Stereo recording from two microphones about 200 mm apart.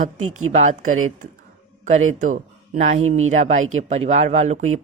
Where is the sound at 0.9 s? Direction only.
90° right.